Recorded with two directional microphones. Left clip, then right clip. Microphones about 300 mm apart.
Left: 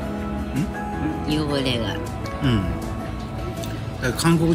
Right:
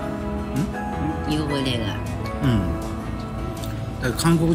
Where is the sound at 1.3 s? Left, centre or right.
Centre.